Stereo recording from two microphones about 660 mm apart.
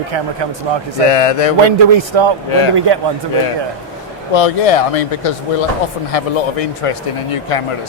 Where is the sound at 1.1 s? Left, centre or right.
Left.